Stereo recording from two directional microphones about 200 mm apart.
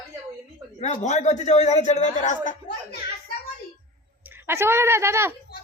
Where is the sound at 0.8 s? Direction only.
35° left (ahead or behind).